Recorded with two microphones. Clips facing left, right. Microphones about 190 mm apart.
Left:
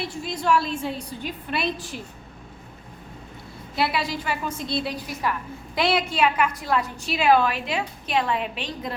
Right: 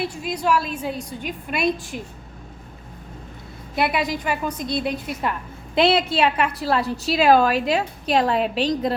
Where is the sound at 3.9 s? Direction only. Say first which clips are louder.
Right 4 dB; 15° right (ahead or behind).